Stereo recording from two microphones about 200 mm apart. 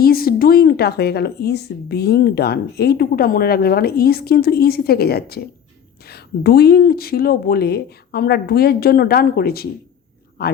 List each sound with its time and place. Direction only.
0.0 s a man's voice: 50° left (ahead or behind)